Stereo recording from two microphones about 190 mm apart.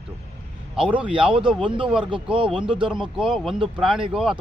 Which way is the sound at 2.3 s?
25° right (ahead or behind).